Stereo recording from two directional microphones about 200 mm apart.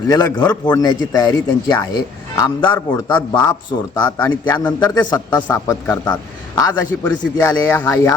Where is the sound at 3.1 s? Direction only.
20° left (ahead or behind).